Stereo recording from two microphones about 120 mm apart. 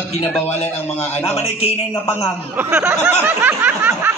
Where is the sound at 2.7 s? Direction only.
15° right (ahead or behind).